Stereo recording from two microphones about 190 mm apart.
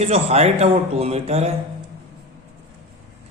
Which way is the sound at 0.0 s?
35° right (ahead or behind).